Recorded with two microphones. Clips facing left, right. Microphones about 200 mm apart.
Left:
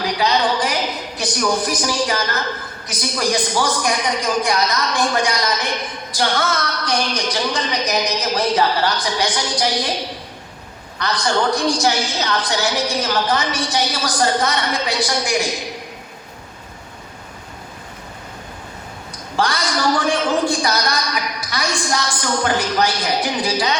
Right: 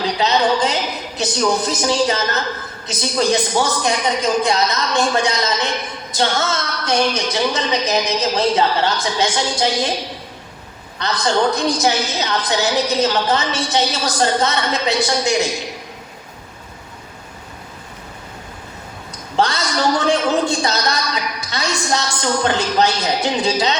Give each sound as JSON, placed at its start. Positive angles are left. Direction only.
{"t": 0.0, "sound": "a sound", "side_deg": -25}
{"t": 2.8, "sound": "a man's voice", "side_deg": -25}
{"t": 11.0, "sound": "a man's voice", "side_deg": -25}
{"t": 19.4, "sound": "a man's voice", "side_deg": -25}